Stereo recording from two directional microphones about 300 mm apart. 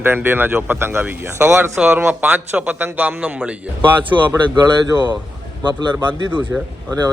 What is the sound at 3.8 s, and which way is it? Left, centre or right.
A man's voice, centre.